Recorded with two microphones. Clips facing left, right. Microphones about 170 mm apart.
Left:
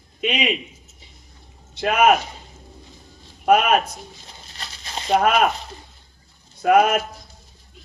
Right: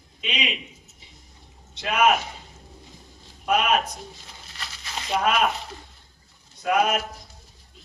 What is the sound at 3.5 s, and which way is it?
Speech, 50° left (ahead or behind).